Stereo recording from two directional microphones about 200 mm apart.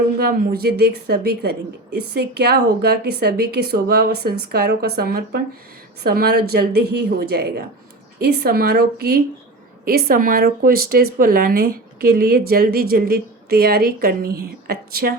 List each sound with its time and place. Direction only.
0.2 s speech: 50° right (ahead or behind)